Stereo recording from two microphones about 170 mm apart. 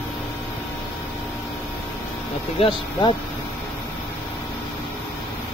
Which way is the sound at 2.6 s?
30° left (ahead or behind).